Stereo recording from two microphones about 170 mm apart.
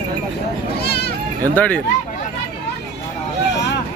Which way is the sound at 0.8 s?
70° left (ahead or behind).